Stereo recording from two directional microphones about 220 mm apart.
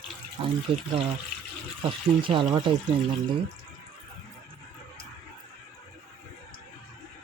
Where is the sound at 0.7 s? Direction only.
25° right (ahead or behind).